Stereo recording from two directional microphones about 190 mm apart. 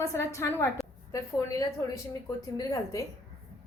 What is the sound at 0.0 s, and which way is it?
A woman's voice, 15° left (ahead or behind).